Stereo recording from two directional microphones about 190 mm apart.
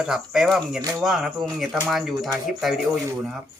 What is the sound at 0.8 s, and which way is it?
Speech, 20° right (ahead or behind).